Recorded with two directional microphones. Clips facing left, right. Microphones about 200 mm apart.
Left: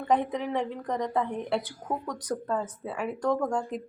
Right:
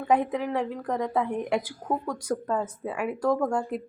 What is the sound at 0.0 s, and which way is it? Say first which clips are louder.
A woman's voice: right 2 dB; 5° right (ahead or behind).